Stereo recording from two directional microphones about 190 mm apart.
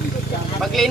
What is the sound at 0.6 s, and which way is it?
Speech, centre (ahead or behind).